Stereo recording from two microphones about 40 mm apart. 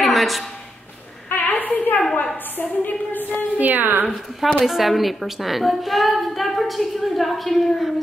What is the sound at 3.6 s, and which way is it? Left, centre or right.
Speech, right.